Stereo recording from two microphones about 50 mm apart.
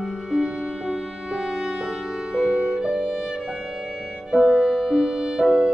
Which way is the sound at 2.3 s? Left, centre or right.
Centre.